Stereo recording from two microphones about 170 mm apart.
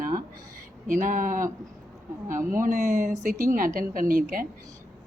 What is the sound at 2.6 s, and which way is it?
A woman's voice, 50° right (ahead or behind).